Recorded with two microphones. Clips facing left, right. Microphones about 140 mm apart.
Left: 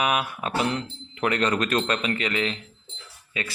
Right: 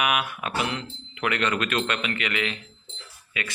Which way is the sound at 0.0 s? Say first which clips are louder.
Left 1 dB; 35° left (ahead or behind).